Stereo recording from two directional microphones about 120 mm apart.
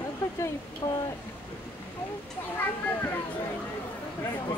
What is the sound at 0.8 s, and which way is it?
Speech, 30° left (ahead or behind).